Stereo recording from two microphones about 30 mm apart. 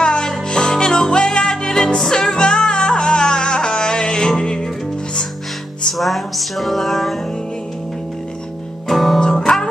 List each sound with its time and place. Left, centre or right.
0.0 s music: left
2.2 s music: left
5.9 s music: centre
8.8 s music: centre